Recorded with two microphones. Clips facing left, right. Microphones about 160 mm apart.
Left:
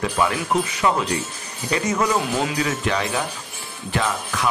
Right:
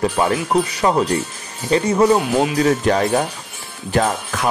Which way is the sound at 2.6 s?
40° right (ahead or behind).